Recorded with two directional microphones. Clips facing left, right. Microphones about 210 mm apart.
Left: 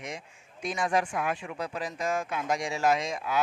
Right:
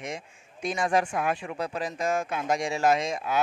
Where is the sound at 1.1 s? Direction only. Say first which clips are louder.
Right 3 dB; 35° right (ahead or behind).